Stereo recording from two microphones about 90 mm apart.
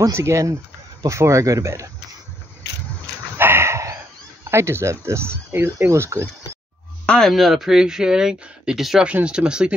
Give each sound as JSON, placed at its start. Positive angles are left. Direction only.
{"t": 0.0, "sound": "speech", "side_deg": -35}
{"t": 3.3, "sound": "a sound", "side_deg": -25}
{"t": 4.5, "sound": "speech", "side_deg": -30}
{"t": 7.1, "sound": "speech", "side_deg": 5}